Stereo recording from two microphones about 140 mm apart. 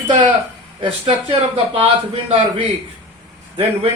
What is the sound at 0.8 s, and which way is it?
A man's voice, 35° right (ahead or behind).